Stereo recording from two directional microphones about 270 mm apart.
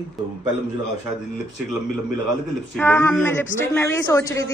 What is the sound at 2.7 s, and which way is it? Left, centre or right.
A woman's voice, centre.